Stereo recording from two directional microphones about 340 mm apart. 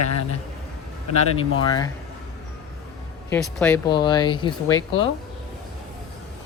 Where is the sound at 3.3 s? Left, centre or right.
Centre.